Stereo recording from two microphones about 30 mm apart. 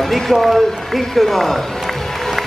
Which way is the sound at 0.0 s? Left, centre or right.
Centre.